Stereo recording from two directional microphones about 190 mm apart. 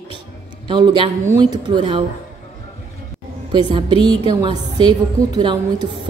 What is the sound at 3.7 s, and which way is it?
A woman's voice, 25° right (ahead or behind).